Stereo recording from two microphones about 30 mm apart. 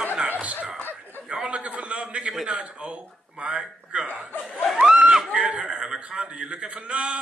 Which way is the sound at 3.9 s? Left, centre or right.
Right.